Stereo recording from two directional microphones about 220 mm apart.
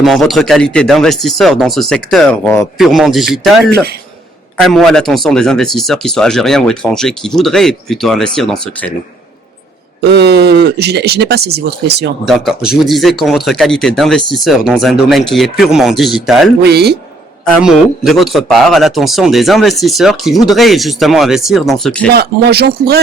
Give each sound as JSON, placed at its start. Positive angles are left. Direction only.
{"t": 0.0, "sound": "a man's voice", "side_deg": 0}
{"t": 4.6, "sound": "a man's voice", "side_deg": 0}
{"t": 10.0, "sound": "speech", "side_deg": -50}
{"t": 12.2, "sound": "a man's voice", "side_deg": 0}
{"t": 16.6, "sound": "speech", "side_deg": -45}
{"t": 17.4, "sound": "a man's voice", "side_deg": 0}
{"t": 22.1, "sound": "speech", "side_deg": -45}